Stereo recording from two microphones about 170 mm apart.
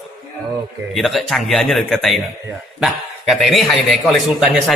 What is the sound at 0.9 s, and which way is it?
A man's voice, centre (ahead or behind).